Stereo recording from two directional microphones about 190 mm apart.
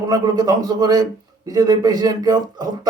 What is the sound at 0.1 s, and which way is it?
Speech, 20° right (ahead or behind).